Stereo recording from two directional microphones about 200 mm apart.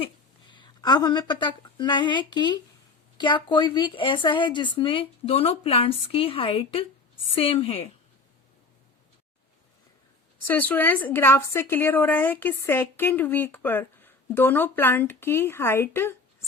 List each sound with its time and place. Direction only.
0.5 s a woman's voice: 20° left (ahead or behind)
10.4 s a woman's voice: 10° left (ahead or behind)